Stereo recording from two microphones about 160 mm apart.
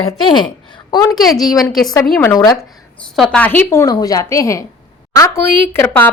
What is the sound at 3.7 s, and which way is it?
A woman's voice, 20° left (ahead or behind).